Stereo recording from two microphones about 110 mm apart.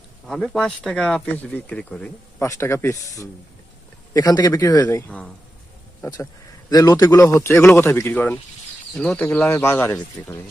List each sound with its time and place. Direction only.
0.3 s a man's voice: centre (ahead or behind)
2.4 s speech: 25° left (ahead or behind)
6.7 s a man's voice: 35° left (ahead or behind); by 9.2 s 10° left (ahead or behind)
9.2 s speech: 20° left (ahead or behind)